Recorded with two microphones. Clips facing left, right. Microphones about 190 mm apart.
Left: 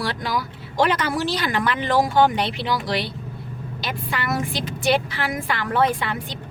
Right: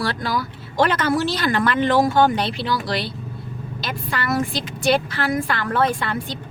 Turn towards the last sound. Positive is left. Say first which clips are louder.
# even
turn(degrees=15)  # may be behind; listen again after turning